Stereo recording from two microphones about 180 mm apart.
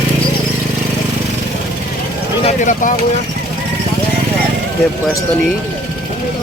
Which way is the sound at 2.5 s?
45° left (ahead or behind).